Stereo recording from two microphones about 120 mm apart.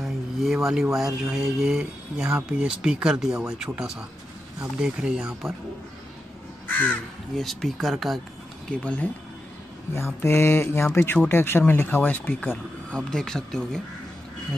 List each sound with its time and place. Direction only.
0.0 s a sound: centre (ahead or behind)
1.3 s speech: 5° right (ahead or behind)
6.7 s speech: 15° left (ahead or behind)
7.3 s speech: centre (ahead or behind)
8.8 s speech: 10° left (ahead or behind)
9.9 s speech: 20° left (ahead or behind); by 13.7 s 5° left (ahead or behind)